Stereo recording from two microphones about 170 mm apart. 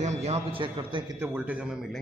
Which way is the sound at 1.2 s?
10° right (ahead or behind).